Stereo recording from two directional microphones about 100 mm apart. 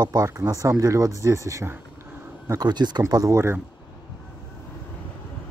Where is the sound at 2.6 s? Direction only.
45° right (ahead or behind).